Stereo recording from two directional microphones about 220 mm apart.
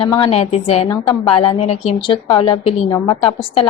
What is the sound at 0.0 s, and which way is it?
A woman's voice, 25° left (ahead or behind).